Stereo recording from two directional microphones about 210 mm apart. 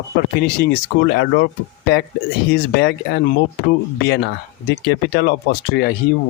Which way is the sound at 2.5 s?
50° left (ahead or behind).